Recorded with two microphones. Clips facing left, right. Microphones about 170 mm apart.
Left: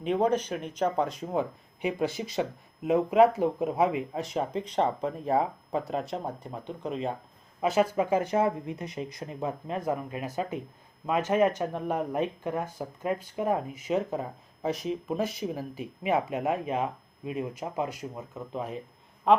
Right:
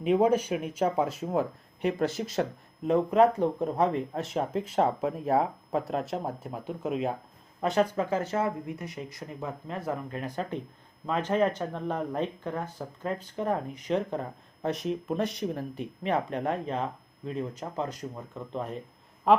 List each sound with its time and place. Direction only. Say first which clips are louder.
0.0 s speech: right 2 dB; 5° right (ahead or behind)